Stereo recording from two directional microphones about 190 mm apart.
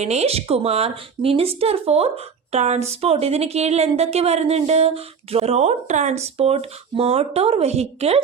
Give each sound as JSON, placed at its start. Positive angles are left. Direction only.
{"t": 0.0, "sound": "speech", "side_deg": -35}